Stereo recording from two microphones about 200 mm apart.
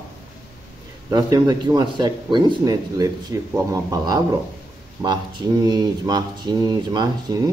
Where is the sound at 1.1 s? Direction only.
20° right (ahead or behind).